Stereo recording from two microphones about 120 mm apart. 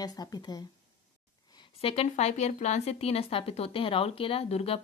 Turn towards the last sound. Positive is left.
turn(degrees=55)  # may be behind; listen again after turning